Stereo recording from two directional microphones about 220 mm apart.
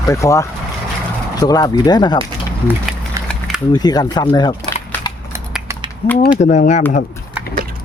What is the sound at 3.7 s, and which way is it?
Speech, 20° left (ahead or behind).